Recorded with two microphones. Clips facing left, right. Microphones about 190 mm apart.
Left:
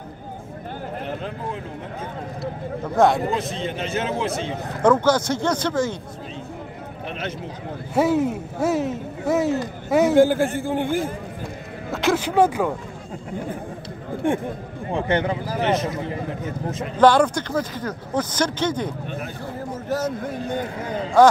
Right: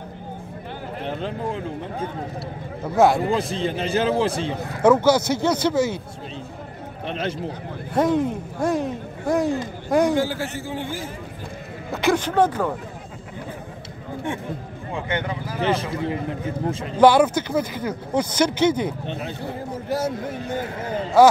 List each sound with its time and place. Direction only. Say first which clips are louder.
1.0 s speech: right 5 dB; 30° right (ahead or behind)
3.0 s speech: right 1 dB; centre (ahead or behind)
3.6 s a man's voice: right 4 dB; 35° right (ahead or behind)
4.8 s speech: right 1 dB; 10° right (ahead or behind)
7.1 s a man's voice: right 4 dB; 30° right (ahead or behind)
7.9 s a man's voice: left 1 dB; 5° left (ahead or behind)
10.1 s a man's voice: left 7 dB; 50° left (ahead or behind)
11.9 s speech: right 1 dB; centre (ahead or behind)
12.3 s speech: left 1 dB; 10° left (ahead or behind)
14.9 s speech: left 5 dB; 35° left (ahead or behind)
15.6 s a man's voice: even; 30° right (ahead or behind)
17.0 s speech: right 1 dB; 10° right (ahead or behind)